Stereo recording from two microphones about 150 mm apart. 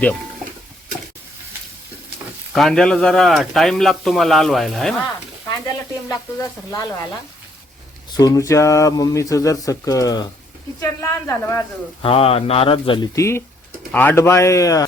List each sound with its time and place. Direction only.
2.6 s speech: 5° left (ahead or behind)
6.1 s speech: 20° left (ahead or behind)
8.1 s speech: 25° left (ahead or behind)
12.0 s speech: 40° left (ahead or behind)
13.1 s speech: 20° left (ahead or behind)